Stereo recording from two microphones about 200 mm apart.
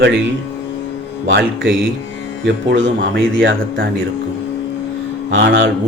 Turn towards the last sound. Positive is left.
turn(degrees=-65)  # may be behind; listen again after turning